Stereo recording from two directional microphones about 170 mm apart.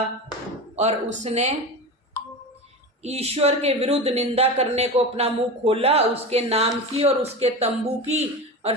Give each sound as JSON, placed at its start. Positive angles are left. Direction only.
{"t": 0.8, "sound": "speech", "side_deg": -40}
{"t": 3.0, "sound": "speech", "side_deg": -40}